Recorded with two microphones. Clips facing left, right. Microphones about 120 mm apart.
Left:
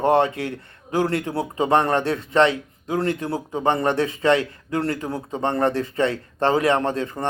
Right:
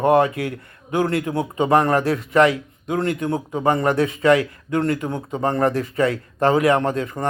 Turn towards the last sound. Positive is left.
turn(degrees=30)  # may be behind; listen again after turning